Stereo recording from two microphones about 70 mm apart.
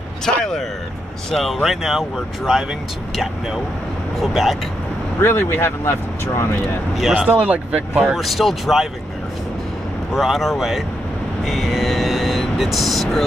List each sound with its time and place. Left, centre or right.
0.2 s a sound: centre
1.3 s speech: centre
4.2 s speech: centre
5.2 s speech: left
7.0 s speech: centre
7.2 s speech: right
8.2 s speech: centre
10.1 s speech: centre